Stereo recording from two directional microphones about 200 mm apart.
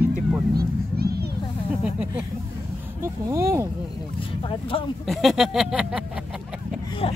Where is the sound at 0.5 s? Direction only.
50° right (ahead or behind).